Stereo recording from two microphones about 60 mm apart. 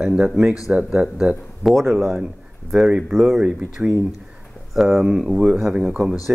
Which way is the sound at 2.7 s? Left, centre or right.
Centre.